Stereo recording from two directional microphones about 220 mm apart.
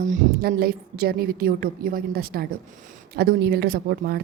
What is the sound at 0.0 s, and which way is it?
Speech, 35° right (ahead or behind).